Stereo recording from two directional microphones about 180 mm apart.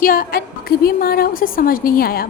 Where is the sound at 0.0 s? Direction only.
55° left (ahead or behind).